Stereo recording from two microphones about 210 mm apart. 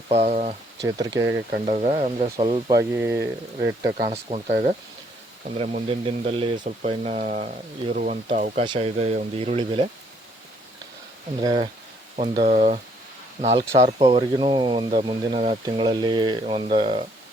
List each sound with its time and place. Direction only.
0.1 s speech: 30° right (ahead or behind)
0.9 s speech: 15° right (ahead or behind)
1.6 s speech: 30° right (ahead or behind)
2.9 s speech: 10° right (ahead or behind)
3.9 s speech: 35° right (ahead or behind)
11.4 s speech: 25° right (ahead or behind)